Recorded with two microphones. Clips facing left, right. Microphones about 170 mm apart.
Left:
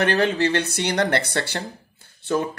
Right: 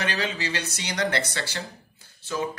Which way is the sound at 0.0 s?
55° left (ahead or behind).